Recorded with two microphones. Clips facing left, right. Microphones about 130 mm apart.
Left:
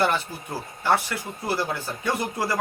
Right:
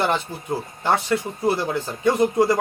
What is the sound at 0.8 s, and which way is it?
A man's voice, 25° right (ahead or behind).